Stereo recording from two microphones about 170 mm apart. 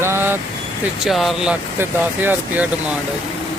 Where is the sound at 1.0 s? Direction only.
Centre (ahead or behind).